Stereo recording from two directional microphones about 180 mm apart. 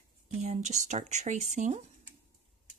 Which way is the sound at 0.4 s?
40° right (ahead or behind).